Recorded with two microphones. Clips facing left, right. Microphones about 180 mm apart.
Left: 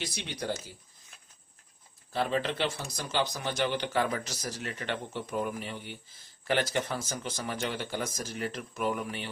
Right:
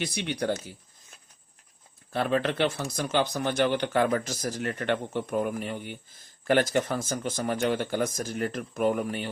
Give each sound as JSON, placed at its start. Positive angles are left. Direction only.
{"t": 0.0, "sound": "speech", "side_deg": -60}
{"t": 2.1, "sound": "speech", "side_deg": -60}